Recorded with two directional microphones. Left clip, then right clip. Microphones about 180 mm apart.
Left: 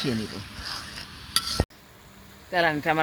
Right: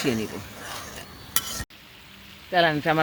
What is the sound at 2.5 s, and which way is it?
Speech, 45° right (ahead or behind).